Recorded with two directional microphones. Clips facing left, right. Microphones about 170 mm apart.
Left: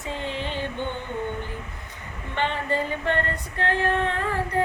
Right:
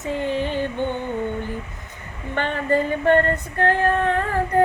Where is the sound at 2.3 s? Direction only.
50° right (ahead or behind).